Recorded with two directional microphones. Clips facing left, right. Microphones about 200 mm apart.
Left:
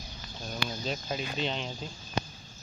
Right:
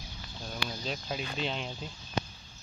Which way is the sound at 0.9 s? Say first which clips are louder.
Left 2 dB; centre (ahead or behind).